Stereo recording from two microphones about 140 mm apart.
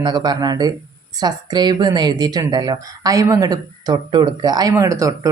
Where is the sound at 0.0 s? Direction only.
30° right (ahead or behind).